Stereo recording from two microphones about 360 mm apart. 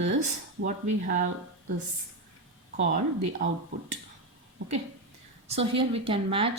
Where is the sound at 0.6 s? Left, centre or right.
Right.